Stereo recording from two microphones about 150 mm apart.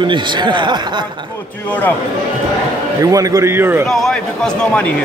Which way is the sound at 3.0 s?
25° right (ahead or behind).